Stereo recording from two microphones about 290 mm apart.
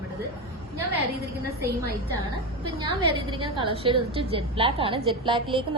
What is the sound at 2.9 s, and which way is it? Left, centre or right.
A woman's voice, centre.